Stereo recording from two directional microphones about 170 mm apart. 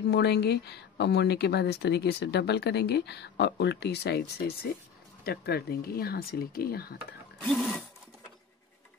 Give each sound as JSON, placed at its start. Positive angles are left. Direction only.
{"t": 0.0, "sound": "speech", "side_deg": 75}
{"t": 5.2, "sound": "speech", "side_deg": 70}
{"t": 7.4, "sound": "sewing machine", "side_deg": 5}